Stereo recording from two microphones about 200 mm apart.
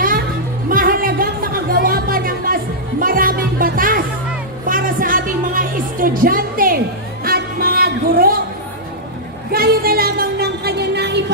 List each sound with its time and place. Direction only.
0.7 s music: 45° right (ahead or behind)
9.5 s music: 50° right (ahead or behind)